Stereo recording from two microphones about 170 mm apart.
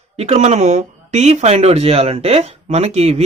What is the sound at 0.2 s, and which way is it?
Speech, 40° right (ahead or behind).